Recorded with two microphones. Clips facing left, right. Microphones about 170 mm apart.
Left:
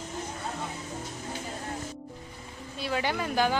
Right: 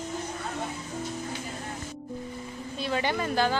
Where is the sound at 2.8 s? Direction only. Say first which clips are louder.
Right 1 dB; 5° left (ahead or behind).